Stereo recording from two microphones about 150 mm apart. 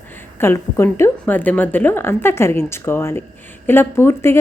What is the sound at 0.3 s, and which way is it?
A woman's voice, 15° left (ahead or behind).